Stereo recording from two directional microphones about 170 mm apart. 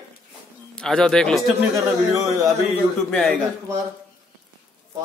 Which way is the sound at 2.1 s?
20° right (ahead or behind).